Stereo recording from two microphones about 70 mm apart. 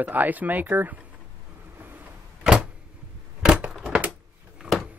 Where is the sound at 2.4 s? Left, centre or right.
Centre.